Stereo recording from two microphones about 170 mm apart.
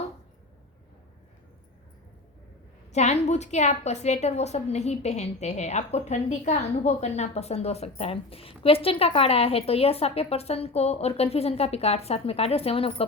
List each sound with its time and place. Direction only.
2.9 s a woman's voice: 40° left (ahead or behind)